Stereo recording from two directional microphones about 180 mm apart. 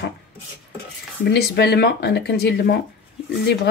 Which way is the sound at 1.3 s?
65° left (ahead or behind).